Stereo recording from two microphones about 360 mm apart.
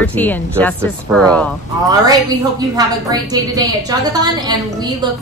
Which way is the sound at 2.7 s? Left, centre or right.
Centre.